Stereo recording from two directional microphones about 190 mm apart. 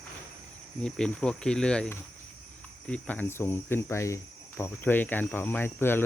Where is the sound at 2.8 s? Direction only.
10° left (ahead or behind).